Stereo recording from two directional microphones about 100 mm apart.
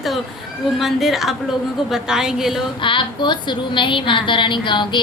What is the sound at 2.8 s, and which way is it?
A woman's voice, 55° left (ahead or behind).